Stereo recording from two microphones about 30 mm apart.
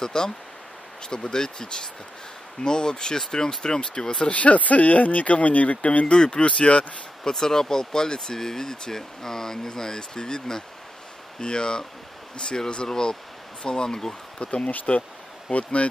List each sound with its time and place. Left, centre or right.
0.0 s speech: left
4.2 s speech: left
6.1 s speech: left
6.4 s speech: left
7.2 s speech: centre
14.4 s speech: left